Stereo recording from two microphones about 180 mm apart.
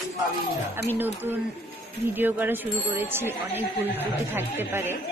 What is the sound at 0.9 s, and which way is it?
A woman's voice, 10° right (ahead or behind).